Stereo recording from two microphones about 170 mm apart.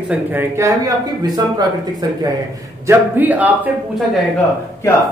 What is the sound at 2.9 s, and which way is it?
Speech, 10° right (ahead or behind).